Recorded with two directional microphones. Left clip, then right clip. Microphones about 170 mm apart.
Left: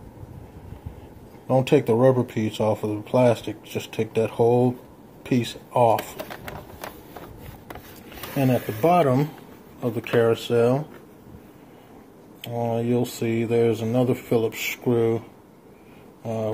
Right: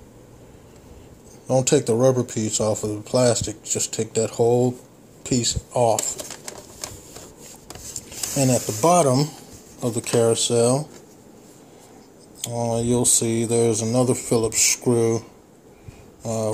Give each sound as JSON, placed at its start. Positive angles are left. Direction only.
{"t": 1.5, "sound": "speech", "side_deg": -15}
{"t": 8.4, "sound": "speech", "side_deg": -20}
{"t": 12.4, "sound": "speech", "side_deg": -25}